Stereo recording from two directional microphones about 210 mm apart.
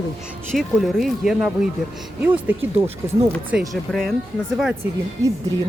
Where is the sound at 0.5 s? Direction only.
Centre (ahead or behind).